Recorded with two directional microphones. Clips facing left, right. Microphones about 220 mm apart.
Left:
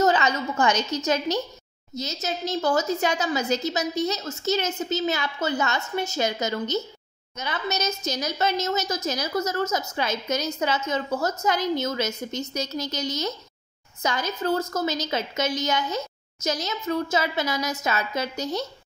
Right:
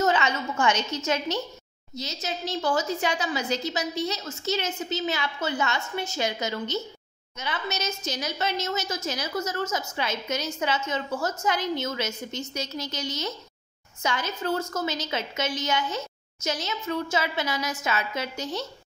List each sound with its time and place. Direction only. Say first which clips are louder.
0.0 s a woman's voice: left 3 dB; 40° left (ahead or behind)